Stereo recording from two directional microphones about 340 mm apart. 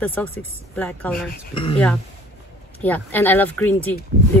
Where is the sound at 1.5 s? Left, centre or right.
Centre.